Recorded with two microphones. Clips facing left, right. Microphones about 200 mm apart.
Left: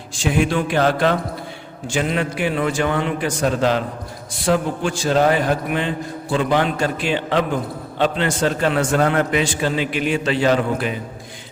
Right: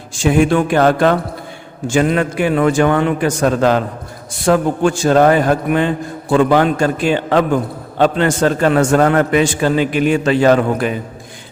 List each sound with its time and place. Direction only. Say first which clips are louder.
0.2 s a man's voice: right 6 dB; 50° right (ahead or behind)